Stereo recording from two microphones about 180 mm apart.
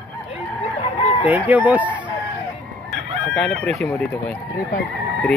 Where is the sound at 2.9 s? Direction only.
Centre (ahead or behind).